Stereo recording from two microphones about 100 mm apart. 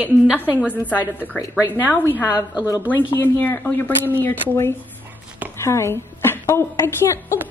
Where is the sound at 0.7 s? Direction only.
15° left (ahead or behind).